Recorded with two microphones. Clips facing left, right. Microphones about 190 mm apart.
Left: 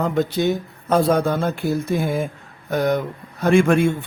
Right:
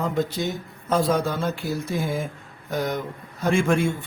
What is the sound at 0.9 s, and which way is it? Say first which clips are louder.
Speech: left 4 dB; 55° left (ahead or behind).